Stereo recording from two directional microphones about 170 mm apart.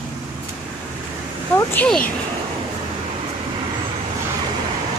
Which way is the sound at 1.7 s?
5° left (ahead or behind).